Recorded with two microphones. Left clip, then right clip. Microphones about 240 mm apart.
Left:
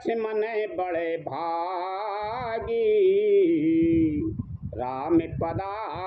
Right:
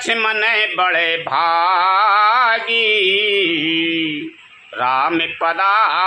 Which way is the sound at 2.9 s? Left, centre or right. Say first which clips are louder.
Right 2 dB; right.